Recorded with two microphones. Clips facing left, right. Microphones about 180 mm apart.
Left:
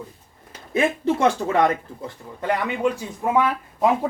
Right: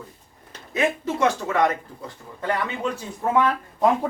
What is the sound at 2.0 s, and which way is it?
Speech, 15° left (ahead or behind).